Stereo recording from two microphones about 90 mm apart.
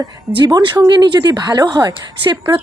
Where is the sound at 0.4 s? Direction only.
50° right (ahead or behind).